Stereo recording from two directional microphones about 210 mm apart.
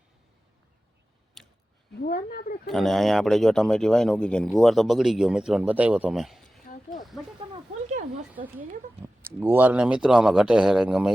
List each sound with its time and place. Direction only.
1.4 s a sound: centre (ahead or behind)
2.0 s speech: 45° left (ahead or behind)
2.6 s speech: centre (ahead or behind)
8.5 s speech: 10° right (ahead or behind)